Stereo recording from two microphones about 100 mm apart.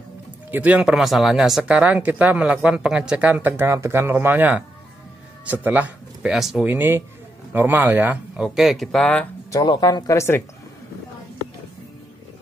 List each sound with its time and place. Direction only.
0.5 s speech: 15° right (ahead or behind)
6.3 s speech: 5° right (ahead or behind)
6.6 s speech: 20° right (ahead or behind)
8.4 s speech: centre (ahead or behind)
9.7 s speech: 45° left (ahead or behind)
10.1 s speech: 25° left (ahead or behind)